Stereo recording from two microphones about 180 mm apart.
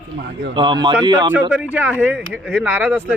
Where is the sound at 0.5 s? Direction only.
25° right (ahead or behind).